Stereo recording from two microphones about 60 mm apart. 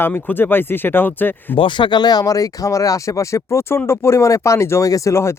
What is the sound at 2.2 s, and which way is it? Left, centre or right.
Speech, left.